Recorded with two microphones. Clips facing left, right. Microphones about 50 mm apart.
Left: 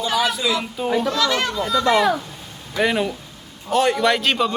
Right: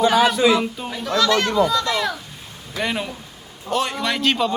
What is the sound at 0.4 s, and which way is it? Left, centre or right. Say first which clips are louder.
Speech: right 6 dB; right.